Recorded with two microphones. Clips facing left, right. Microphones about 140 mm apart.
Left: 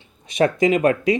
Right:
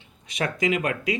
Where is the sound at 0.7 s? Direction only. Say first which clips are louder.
Left 6 dB; 40° left (ahead or behind).